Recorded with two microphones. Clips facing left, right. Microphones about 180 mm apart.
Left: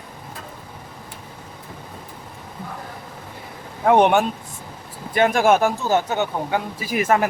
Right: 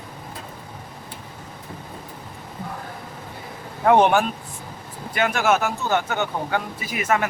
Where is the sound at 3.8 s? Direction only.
15° left (ahead or behind).